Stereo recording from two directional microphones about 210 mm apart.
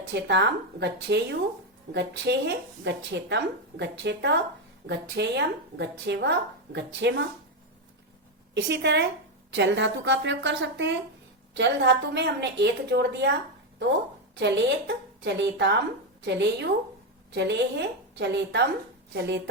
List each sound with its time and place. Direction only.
0.1 s speech: 55° right (ahead or behind)
8.5 s speech: 60° right (ahead or behind)
14.3 s speech: 55° right (ahead or behind)